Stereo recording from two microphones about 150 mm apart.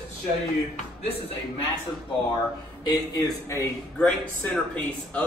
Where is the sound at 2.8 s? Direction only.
25° left (ahead or behind).